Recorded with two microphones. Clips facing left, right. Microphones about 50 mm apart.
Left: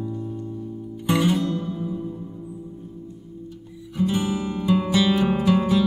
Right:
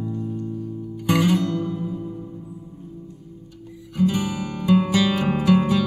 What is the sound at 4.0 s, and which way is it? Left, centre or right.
Guitar, centre.